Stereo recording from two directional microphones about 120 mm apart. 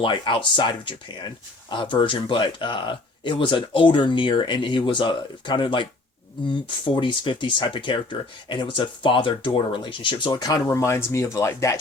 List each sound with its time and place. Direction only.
0.0 s speech: 45° left (ahead or behind)
10.7 s speech: 20° left (ahead or behind)